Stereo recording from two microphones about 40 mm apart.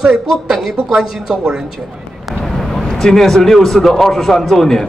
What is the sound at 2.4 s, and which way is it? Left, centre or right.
A man's voice, centre.